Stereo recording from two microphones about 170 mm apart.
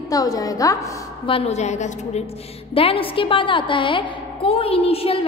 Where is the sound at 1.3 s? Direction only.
40° left (ahead or behind).